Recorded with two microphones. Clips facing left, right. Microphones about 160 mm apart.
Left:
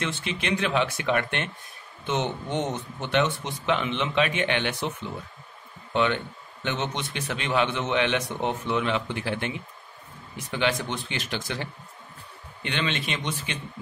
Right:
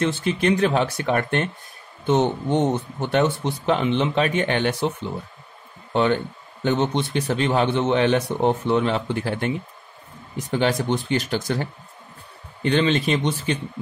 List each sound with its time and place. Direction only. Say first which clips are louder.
0.0 s a man's voice: right 9 dB; 40° right (ahead or behind)
5.9 s a man's voice: right 4 dB; 35° right (ahead or behind)